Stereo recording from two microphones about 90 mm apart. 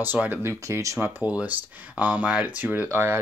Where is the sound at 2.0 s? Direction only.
15° right (ahead or behind).